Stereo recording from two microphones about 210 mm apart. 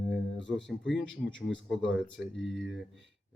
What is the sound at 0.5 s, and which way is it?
Speech, 60° left (ahead or behind).